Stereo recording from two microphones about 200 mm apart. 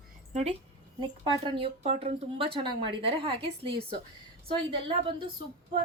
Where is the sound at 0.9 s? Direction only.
20° right (ahead or behind).